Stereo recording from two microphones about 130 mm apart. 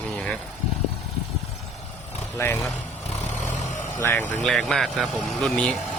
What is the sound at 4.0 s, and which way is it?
Speech, 15° left (ahead or behind).